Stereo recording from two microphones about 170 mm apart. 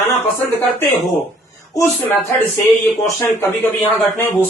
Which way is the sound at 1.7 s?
20° left (ahead or behind).